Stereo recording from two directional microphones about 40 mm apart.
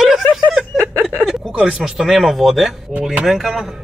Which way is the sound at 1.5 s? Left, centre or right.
Right.